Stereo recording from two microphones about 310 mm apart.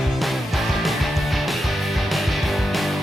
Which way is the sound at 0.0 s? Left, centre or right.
Centre.